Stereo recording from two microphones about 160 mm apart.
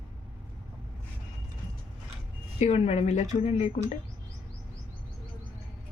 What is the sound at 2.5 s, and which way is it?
A woman's voice, 45° left (ahead or behind).